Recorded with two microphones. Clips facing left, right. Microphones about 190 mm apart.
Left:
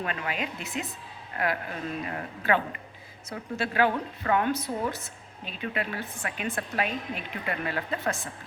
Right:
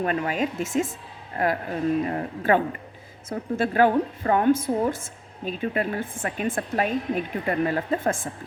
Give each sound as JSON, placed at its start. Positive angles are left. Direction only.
{"t": 0.0, "sound": "a woman's voice", "side_deg": -45}
{"t": 4.2, "sound": "a woman's voice", "side_deg": -35}